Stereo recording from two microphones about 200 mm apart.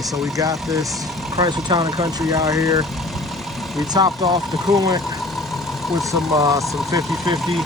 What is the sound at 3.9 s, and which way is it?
Speech, 20° right (ahead or behind).